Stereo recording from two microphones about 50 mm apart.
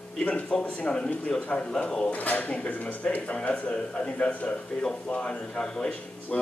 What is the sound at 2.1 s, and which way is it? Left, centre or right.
Speech, left.